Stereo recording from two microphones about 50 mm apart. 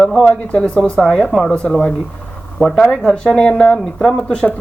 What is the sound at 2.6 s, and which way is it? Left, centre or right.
Speech, centre.